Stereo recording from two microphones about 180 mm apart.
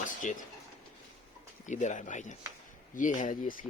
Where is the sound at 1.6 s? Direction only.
45° left (ahead or behind).